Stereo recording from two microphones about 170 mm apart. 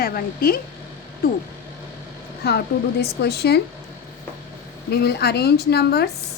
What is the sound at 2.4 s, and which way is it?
A woman's voice, 70° left (ahead or behind).